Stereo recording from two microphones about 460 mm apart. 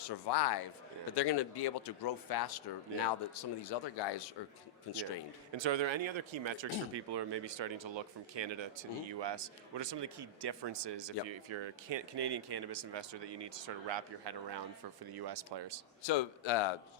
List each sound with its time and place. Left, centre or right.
0.0 s a man's voice: left
5.5 s speech: right
15.1 s speech: right
16.0 s speech: left